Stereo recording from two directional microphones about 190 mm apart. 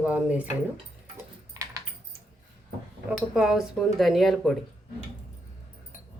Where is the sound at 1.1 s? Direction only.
15° right (ahead or behind).